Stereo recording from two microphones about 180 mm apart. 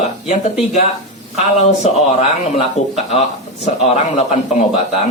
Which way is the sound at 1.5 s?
35° left (ahead or behind).